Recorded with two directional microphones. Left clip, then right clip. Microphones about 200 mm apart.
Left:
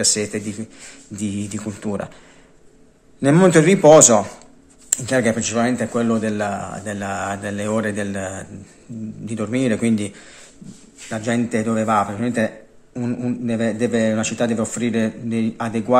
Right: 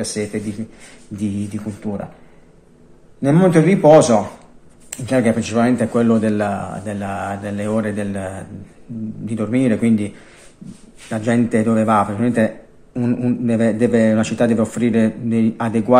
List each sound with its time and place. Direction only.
0.0 s speech: 30° left (ahead or behind)
3.2 s speech: 30° left (ahead or behind); by 6.6 s 5° left (ahead or behind)
6.6 s speech: 20° left (ahead or behind)
11.1 s a man's voice: centre (ahead or behind)